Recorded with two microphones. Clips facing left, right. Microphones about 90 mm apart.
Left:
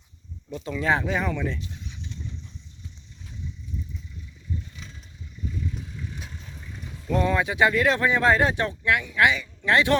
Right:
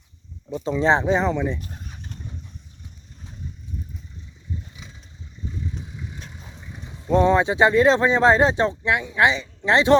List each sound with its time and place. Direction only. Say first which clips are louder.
0.5 s speech: right 5 dB; 25° right (ahead or behind)
1.5 s vehicle: right 1 dB; 45° right (ahead or behind)
5.7 s vehicle: right 1 dB; 20° right (ahead or behind)
6.4 s speech: right 1 dB; 20° right (ahead or behind)